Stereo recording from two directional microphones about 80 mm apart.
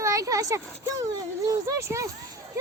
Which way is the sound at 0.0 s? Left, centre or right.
Right.